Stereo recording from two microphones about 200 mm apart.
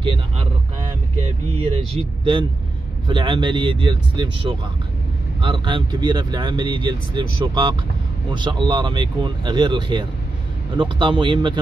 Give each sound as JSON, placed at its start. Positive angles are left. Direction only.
{"t": 0.0, "sound": "speech", "side_deg": -25}
{"t": 1.9, "sound": "speech", "side_deg": -25}